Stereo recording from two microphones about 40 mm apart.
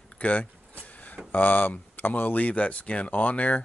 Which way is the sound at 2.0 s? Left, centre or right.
Left.